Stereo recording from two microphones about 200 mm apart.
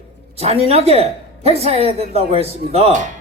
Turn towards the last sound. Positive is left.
turn(degrees=-35)  # may be behind; listen again after turning